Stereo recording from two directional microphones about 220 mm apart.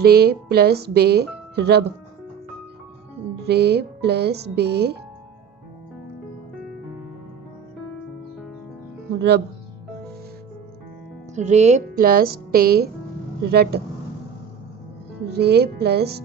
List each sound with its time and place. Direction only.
0.0 s speech: 45° right (ahead or behind)
3.4 s speech: 50° right (ahead or behind)
11.3 s speech: 30° right (ahead or behind)
15.2 s speech: 50° right (ahead or behind)